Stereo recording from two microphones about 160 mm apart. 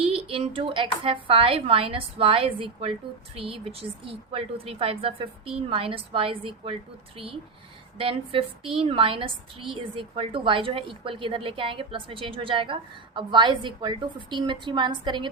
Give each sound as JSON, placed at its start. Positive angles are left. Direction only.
{"t": 0.0, "sound": "a woman's voice", "side_deg": -35}
{"t": 7.9, "sound": "a woman's voice", "side_deg": -35}